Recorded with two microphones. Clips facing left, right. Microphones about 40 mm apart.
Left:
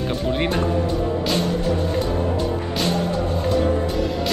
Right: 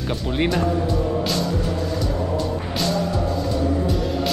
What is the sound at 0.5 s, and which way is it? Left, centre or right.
Speech, left.